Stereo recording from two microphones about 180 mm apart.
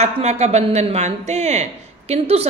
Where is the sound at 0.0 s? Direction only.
35° right (ahead or behind).